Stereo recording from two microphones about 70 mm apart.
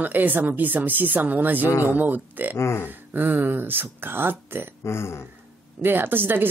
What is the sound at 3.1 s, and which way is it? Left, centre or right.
Speech, right.